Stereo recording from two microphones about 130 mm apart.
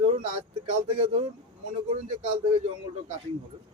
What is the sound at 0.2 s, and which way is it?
Speech, 50° right (ahead or behind).